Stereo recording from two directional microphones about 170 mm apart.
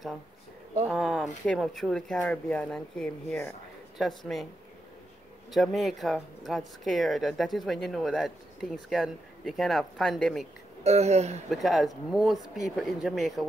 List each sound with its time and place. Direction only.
0.8 s speech: centre (ahead or behind)
5.5 s speech: centre (ahead or behind)
10.8 s speech: 40° right (ahead or behind)
11.5 s speech: centre (ahead or behind)